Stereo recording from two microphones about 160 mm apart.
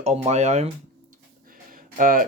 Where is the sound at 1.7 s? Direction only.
60° right (ahead or behind).